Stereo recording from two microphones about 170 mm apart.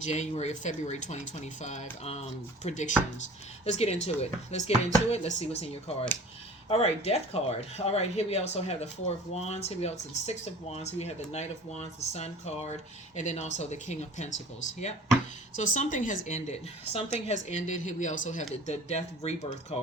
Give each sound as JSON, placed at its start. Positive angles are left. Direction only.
{"t": 0.0, "sound": "speech", "side_deg": 40}
{"t": 15.5, "sound": "speech", "side_deg": 45}